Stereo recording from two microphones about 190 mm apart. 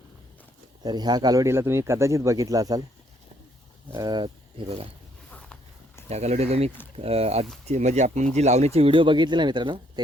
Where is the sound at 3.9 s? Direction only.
20° right (ahead or behind).